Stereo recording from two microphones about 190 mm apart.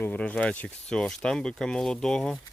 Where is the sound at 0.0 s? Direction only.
10° left (ahead or behind).